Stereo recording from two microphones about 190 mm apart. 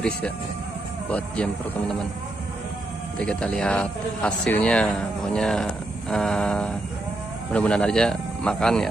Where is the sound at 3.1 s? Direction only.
5° left (ahead or behind).